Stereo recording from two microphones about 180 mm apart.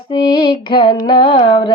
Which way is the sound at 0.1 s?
25° left (ahead or behind).